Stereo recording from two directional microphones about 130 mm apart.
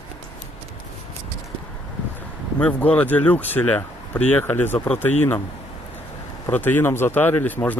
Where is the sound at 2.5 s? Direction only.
10° left (ahead or behind).